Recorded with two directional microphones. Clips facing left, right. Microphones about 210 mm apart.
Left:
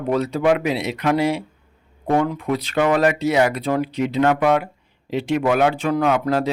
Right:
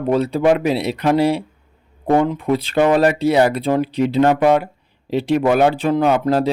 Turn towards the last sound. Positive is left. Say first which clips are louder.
# right 3 dB
turn(degrees=-30)  # may be behind; listen again after turning